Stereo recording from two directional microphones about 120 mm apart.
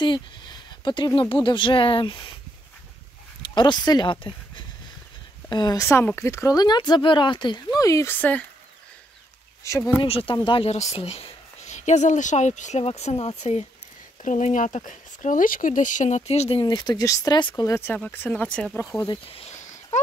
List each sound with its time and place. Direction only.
0.0 s speech: 40° left (ahead or behind)
3.4 s speech: 40° left (ahead or behind)
5.9 s speech: 20° left (ahead or behind)
8.2 s speech: 15° left (ahead or behind)
9.7 s speech: 25° left (ahead or behind)
10.0 s speech: 50° left (ahead or behind)
10.3 s speech: 40° left (ahead or behind)
10.7 s speech: 65° left (ahead or behind)
11.6 s speech: 75° left (ahead or behind)
14.2 s speech: 90° left; by 16.6 s 55° left (ahead or behind)
16.6 s speech: 35° left (ahead or behind)
17.4 s speech: 40° left (ahead or behind)
17.6 s speech: 20° left (ahead or behind)
19.3 s a sound: 65° left (ahead or behind)